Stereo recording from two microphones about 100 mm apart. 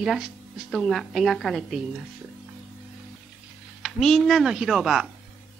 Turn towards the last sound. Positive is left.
turn(degrees=-5)  # may be behind; listen again after turning